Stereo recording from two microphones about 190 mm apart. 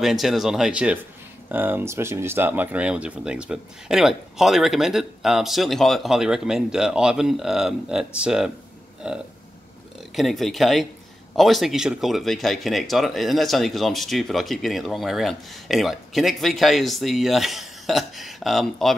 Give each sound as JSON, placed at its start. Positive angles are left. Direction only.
{"t": 0.0, "sound": "speech", "side_deg": 0}